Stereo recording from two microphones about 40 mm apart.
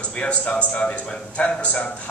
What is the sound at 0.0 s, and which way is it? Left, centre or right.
A man's voice, left.